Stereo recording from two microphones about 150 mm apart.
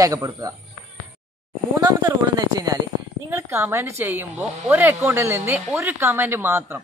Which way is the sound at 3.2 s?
15° right (ahead or behind).